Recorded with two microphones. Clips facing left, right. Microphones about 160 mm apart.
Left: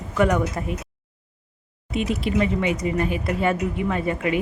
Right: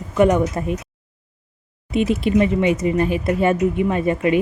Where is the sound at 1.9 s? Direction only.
25° right (ahead or behind).